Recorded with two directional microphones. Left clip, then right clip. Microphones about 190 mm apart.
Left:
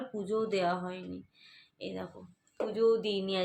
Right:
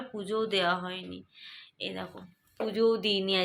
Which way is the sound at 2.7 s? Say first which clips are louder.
Right 2 dB; 30° right (ahead or behind).